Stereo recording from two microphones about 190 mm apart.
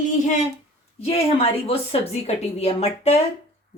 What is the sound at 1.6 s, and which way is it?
Speech, 30° left (ahead or behind).